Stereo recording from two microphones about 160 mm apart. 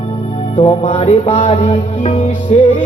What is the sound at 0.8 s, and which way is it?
Music, 45° left (ahead or behind).